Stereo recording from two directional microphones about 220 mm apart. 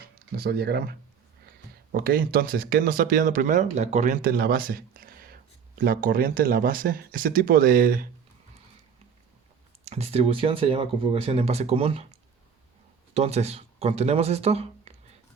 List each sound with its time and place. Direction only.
0.3 s speech: 45° right (ahead or behind)
9.8 s speech: 30° right (ahead or behind)
13.1 s speech: 30° right (ahead or behind)